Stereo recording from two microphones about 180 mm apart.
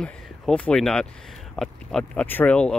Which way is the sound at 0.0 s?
5° left (ahead or behind).